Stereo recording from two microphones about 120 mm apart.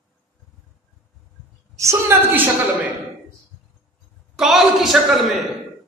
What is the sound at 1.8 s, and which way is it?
Speech, 20° right (ahead or behind).